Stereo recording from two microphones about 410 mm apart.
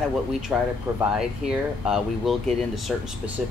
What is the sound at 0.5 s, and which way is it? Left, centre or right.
Speech, centre.